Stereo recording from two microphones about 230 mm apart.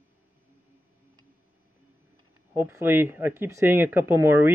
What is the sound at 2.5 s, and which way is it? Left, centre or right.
Speech, centre.